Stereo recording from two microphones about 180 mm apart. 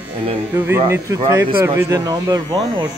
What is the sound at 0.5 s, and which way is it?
Speech, 10° right (ahead or behind).